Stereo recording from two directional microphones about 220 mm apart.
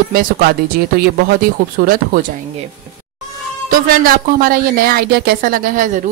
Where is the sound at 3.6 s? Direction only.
40° right (ahead or behind).